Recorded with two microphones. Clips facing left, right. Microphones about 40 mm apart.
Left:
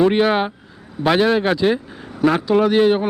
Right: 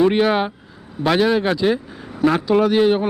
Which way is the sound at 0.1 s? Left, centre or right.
Centre.